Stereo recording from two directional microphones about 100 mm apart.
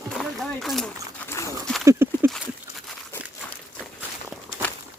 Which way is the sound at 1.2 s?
25° left (ahead or behind).